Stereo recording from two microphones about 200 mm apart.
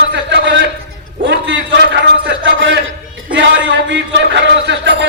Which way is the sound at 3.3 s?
65° right (ahead or behind).